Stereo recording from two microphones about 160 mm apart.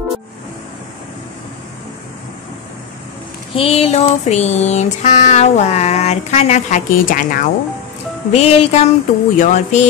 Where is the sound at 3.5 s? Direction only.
40° left (ahead or behind); by 7.4 s 60° left (ahead or behind).